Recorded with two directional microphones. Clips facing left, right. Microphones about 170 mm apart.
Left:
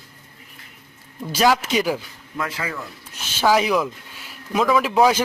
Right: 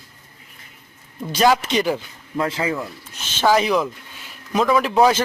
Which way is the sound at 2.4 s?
25° right (ahead or behind).